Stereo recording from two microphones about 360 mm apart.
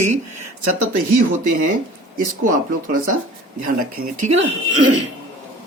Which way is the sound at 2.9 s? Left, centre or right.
Right.